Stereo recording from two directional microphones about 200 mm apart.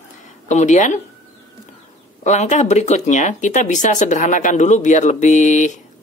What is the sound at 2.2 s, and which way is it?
Speech, 35° left (ahead or behind).